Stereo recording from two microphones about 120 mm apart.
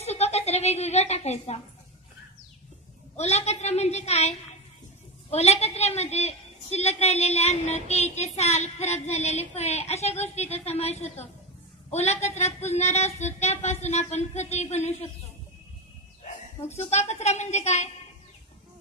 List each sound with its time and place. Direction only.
0.0 s a sound: 65° left (ahead or behind)
3.2 s a woman's voice: 65° left (ahead or behind)
16.6 s speech: 65° left (ahead or behind)